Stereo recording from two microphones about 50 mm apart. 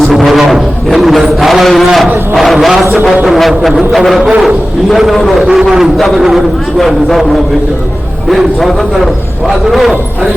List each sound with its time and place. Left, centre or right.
0.0 s music: centre
0.9 s a sound: centre
2.3 s a man's voice: centre
4.2 s a man's voice: centre
4.4 s a man's voice: centre
8.3 s a man's voice: centre